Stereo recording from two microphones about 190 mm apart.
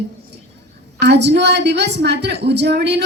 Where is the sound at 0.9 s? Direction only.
65° right (ahead or behind).